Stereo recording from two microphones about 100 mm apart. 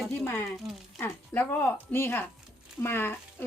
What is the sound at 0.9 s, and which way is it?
Speech, 25° left (ahead or behind).